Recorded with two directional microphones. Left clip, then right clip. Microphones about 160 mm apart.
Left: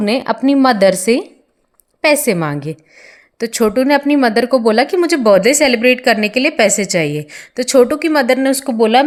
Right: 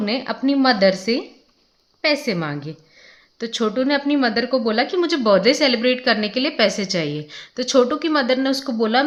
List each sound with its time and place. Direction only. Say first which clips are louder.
0.0 s a woman's voice: left 7 dB; 45° left (ahead or behind)